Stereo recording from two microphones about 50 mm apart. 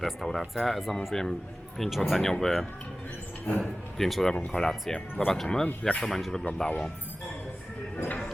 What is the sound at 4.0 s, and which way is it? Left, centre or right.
Speech, centre.